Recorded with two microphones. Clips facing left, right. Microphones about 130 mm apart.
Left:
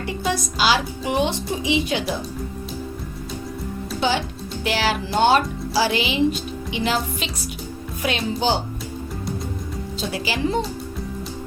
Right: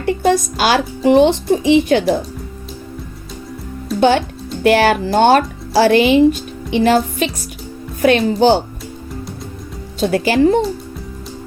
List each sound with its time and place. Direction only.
0.0 s speech: 55° right (ahead or behind)
4.6 s speech: 60° right (ahead or behind)
10.0 s speech: 55° right (ahead or behind)